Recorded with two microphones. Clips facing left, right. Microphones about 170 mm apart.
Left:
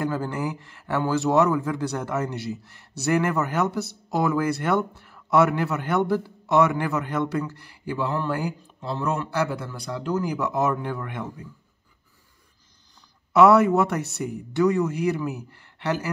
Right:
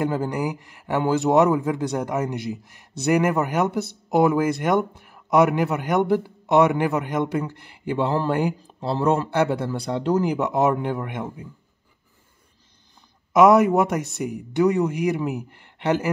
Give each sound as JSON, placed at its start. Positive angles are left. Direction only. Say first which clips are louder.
{"t": 0.0, "sound": "a man's voice", "louder": "right 3 dB", "side_deg": -15}
{"t": 13.3, "sound": "a man's voice", "louder": "right 1 dB", "side_deg": -15}